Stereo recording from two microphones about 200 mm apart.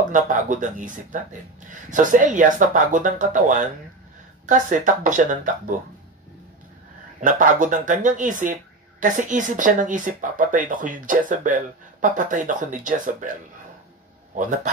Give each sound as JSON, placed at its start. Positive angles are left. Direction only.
{"t": 0.1, "sound": "speech", "side_deg": -40}
{"t": 7.2, "sound": "speech", "side_deg": -40}
{"t": 14.3, "sound": "a man's voice", "side_deg": -40}